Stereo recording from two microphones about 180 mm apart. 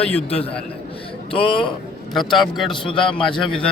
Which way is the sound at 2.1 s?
Centre (ahead or behind).